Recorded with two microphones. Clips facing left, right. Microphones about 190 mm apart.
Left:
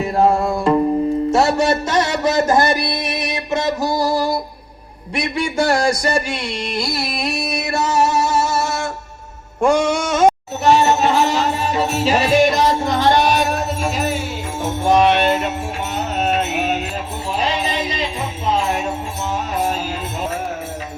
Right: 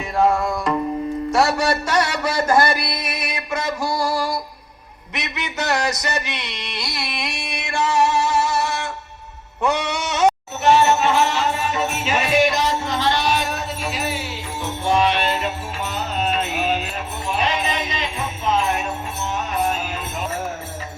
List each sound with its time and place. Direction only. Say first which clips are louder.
0.0 s tabla: left 3 dB; 35° left (ahead or behind)
1.3 s music: left 1 dB; 25° left (ahead or behind)
5.2 s a sound: left 8 dB; 30° left (ahead or behind)
6.3 s music: left 8 dB; 45° left (ahead or behind)
9.6 s mantra: left 6 dB; 50° left (ahead or behind); by 16.6 s 65° left (ahead or behind)
17.3 s music: left 2 dB; 30° left (ahead or behind)